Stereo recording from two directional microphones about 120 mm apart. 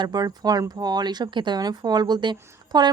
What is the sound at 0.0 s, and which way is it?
Speech, 35° right (ahead or behind).